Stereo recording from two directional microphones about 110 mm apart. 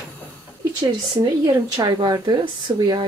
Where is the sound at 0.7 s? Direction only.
40° right (ahead or behind).